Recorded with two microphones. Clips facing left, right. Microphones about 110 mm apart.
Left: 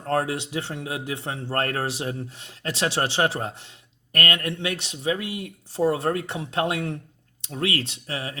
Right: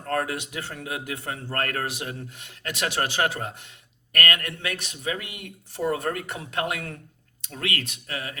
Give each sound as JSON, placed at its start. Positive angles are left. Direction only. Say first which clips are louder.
{"t": 0.0, "sound": "a man's voice", "louder": "left 3 dB", "side_deg": 25}